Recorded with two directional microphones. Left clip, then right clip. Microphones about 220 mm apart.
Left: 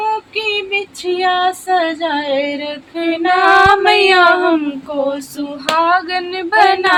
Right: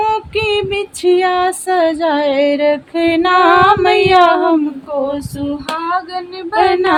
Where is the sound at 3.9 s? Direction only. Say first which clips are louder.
Even; 25° left (ahead or behind).